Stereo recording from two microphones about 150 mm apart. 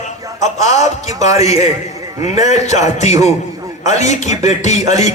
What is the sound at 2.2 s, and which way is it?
A man's voice, 50° left (ahead or behind).